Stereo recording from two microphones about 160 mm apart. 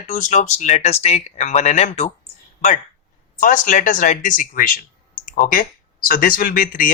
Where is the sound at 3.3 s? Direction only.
55° left (ahead or behind).